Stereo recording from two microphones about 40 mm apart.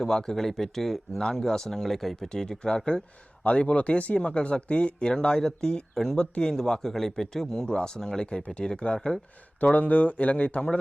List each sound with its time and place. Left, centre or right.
0.0 s speech: centre
2.3 s speech: centre
3.4 s speech: left
9.7 s speech: left